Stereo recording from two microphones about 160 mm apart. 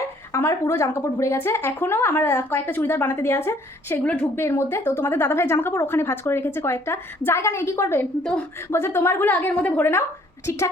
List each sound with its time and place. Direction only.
0.3 s a woman's voice: 15° left (ahead or behind)